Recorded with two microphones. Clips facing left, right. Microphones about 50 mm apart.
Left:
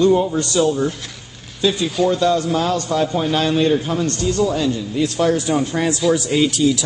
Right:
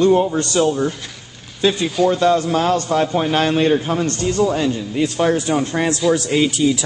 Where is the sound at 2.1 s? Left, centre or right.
Right.